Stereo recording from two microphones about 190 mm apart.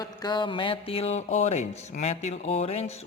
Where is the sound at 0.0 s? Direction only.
20° left (ahead or behind).